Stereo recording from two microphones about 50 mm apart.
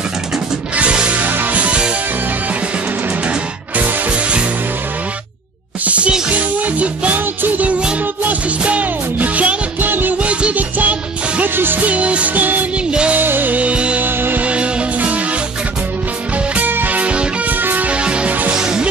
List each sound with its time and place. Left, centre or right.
0.7 s music: right
1.3 s music: right
3.3 s music: right
5.9 s music: right
10.1 s music: right
11.5 s music: right
11.8 s music: right
14.0 s music: right
14.4 s music: right
16.5 s music: right
17.5 s music: right
17.8 s music: right